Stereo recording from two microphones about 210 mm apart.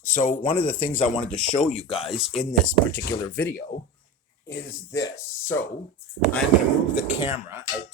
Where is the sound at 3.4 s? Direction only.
10° left (ahead or behind).